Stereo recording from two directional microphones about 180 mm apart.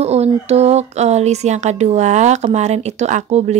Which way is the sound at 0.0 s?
35° right (ahead or behind).